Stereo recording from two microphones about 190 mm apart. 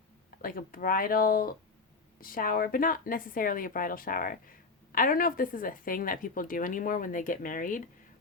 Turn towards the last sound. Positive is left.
turn(degrees=45)  # may be behind; listen again after turning